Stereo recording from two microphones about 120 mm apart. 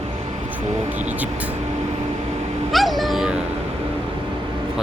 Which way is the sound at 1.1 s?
10° right (ahead or behind).